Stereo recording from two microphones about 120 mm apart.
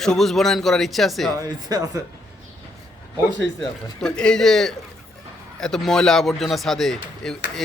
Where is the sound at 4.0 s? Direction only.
5° left (ahead or behind).